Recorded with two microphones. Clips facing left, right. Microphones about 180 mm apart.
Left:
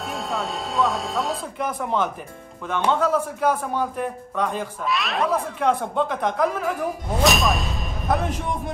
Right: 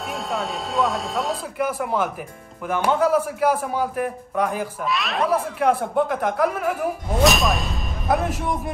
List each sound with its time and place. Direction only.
0.0 s a man's voice: centre (ahead or behind)